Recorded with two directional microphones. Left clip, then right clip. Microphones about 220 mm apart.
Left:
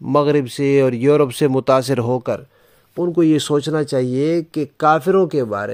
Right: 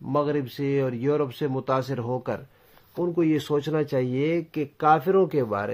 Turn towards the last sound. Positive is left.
turn(degrees=25)  # may be behind; listen again after turning